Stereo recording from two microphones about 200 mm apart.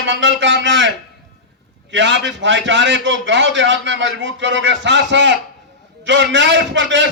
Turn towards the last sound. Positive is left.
turn(degrees=-65)  # may be behind; listen again after turning